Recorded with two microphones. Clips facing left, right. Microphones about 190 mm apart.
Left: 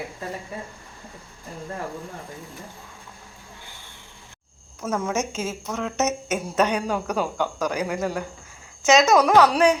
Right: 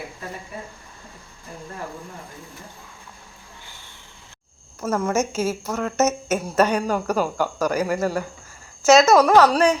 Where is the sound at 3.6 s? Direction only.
15° left (ahead or behind).